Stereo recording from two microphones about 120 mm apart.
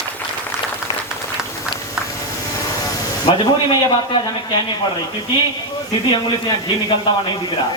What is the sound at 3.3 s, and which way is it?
Speech, 50° left (ahead or behind).